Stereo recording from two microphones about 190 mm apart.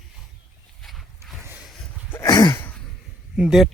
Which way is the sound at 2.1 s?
20° left (ahead or behind).